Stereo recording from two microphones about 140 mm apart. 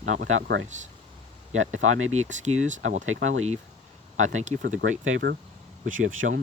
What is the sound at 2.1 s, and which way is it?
Speech, 55° right (ahead or behind).